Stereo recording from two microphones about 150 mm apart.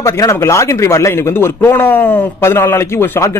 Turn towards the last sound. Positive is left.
turn(degrees=15)  # may be behind; listen again after turning